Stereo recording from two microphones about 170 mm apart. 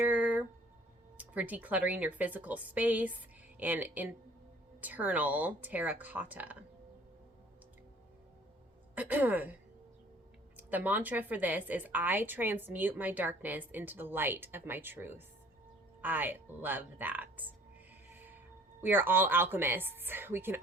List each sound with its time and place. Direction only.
0.0 s a sound: 10° right (ahead or behind)
1.2 s a woman's voice: 10° right (ahead or behind)
9.0 s a woman's voice: 10° right (ahead or behind)
10.6 s a woman's voice: 10° right (ahead or behind)
18.1 s music: 10° right (ahead or behind)
18.8 s a woman's voice: 10° right (ahead or behind)